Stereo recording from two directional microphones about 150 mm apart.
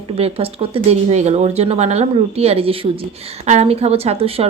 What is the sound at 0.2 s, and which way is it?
A woman's voice, 40° right (ahead or behind).